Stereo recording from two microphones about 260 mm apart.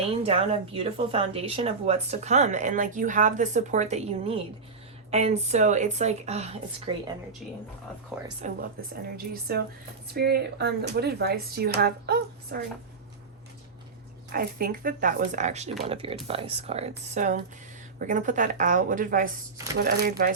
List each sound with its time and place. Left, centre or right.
0.1 s speech: right
8.1 s speech: centre
9.1 s speech: right
14.3 s speech: right